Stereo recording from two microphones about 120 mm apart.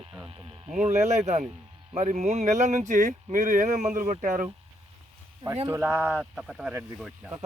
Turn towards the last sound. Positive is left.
turn(degrees=-20)  # may be behind; listen again after turning